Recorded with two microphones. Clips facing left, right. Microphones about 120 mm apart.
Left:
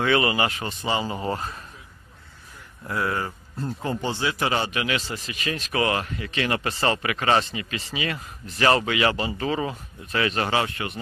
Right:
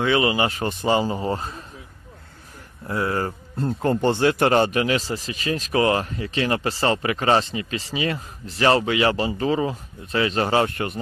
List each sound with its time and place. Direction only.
0.0 s speech: 20° right (ahead or behind)
0.5 s a man's voice: 40° right (ahead or behind)
1.1 s speech: 30° right (ahead or behind)
2.9 s speech: 30° right (ahead or behind)
3.6 s a man's voice: 60° right (ahead or behind); by 11.0 s 40° right (ahead or behind)